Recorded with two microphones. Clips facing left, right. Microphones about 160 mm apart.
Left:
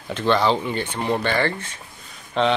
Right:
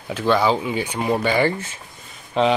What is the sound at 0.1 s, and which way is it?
Speech, 5° right (ahead or behind).